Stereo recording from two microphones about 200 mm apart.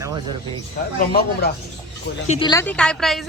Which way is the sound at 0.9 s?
50° left (ahead or behind).